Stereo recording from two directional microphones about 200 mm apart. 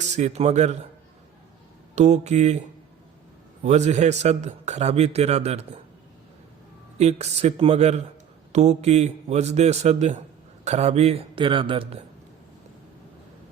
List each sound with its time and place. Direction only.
0.1 s a man's voice: 35° right (ahead or behind)
2.0 s a man's voice: 35° right (ahead or behind)
3.6 s a man's voice: 35° right (ahead or behind)
7.0 s a man's voice: 35° right (ahead or behind)